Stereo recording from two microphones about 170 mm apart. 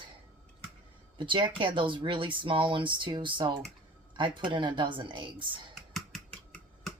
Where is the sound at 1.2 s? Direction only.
30° right (ahead or behind).